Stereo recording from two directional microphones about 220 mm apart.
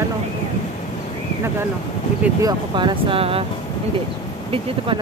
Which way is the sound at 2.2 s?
20° right (ahead or behind).